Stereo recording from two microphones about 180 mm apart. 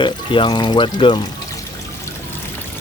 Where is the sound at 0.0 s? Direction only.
25° left (ahead or behind).